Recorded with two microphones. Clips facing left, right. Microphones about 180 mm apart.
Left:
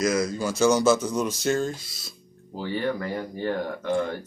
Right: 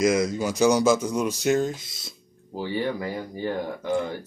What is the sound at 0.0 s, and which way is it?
Speech, 25° right (ahead or behind).